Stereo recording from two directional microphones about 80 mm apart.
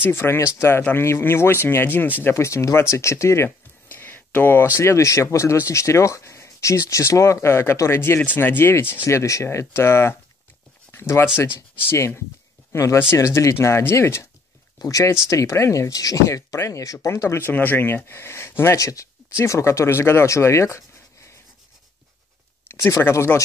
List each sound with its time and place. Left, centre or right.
0.0 s speech: left
2.2 s speech: left
3.4 s a sound: left
4.7 s speech: left
9.0 s speech: left
14.8 s speech: left
22.8 s speech: left